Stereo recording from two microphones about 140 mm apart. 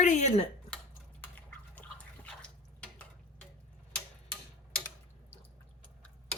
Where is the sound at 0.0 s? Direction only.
60° left (ahead or behind).